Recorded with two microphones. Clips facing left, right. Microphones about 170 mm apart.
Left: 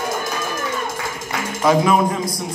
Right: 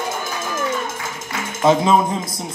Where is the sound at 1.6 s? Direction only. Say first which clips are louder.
Right 1 dB; 25° right (ahead or behind).